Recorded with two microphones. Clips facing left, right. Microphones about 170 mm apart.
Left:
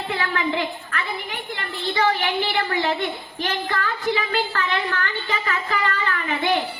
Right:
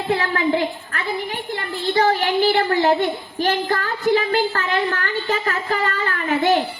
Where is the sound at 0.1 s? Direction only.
40° right (ahead or behind).